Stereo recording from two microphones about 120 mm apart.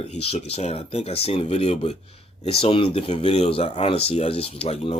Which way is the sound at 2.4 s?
50° left (ahead or behind).